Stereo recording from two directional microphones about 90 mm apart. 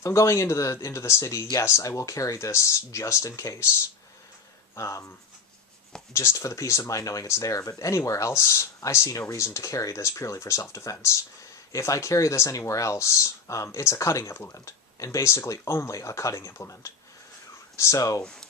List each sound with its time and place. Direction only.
0.0 s speech: 35° left (ahead or behind)
4.7 s speech: 35° left (ahead or behind)
6.1 s speech: 35° left (ahead or behind)
18.2 s speech: 10° left (ahead or behind)